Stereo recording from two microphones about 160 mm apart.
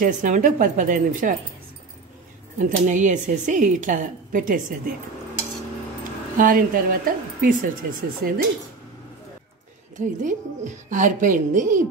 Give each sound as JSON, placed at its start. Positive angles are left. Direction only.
{"t": 0.0, "sound": "a woman's voice", "side_deg": -55}
{"t": 2.6, "sound": "a woman's voice", "side_deg": -50}
{"t": 6.3, "sound": "a woman's voice", "side_deg": -60}
{"t": 9.9, "sound": "a woman's voice", "side_deg": -50}